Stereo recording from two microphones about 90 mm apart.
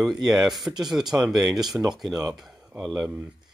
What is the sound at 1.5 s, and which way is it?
Speech, 45° right (ahead or behind).